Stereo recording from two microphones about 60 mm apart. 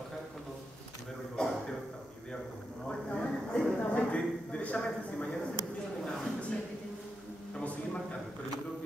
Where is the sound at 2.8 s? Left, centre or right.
Centre.